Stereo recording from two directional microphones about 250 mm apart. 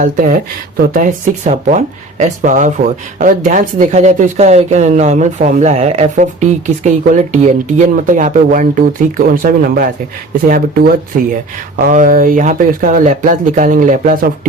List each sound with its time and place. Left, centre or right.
0.0 s speech: right